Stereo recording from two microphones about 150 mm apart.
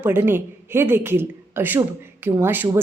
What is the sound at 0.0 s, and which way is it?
A woman's voice, 15° right (ahead or behind).